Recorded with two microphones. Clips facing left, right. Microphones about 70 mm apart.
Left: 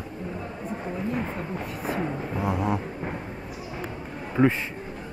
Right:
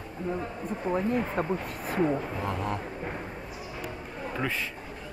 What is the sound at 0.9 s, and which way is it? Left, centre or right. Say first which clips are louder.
Speech: right 3 dB; right.